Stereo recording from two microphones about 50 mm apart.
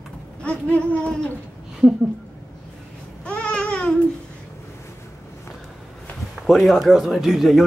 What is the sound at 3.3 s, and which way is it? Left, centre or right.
Babbling, left.